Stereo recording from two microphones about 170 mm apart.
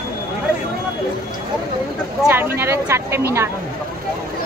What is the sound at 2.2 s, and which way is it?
Speech, 10° right (ahead or behind).